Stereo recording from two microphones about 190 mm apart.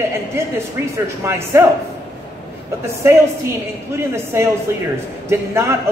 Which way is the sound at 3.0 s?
15° right (ahead or behind).